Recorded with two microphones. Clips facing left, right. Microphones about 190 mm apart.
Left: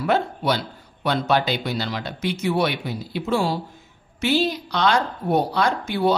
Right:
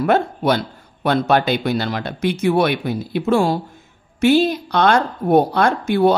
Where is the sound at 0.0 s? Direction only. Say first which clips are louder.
Right 5 dB; 50° right (ahead or behind).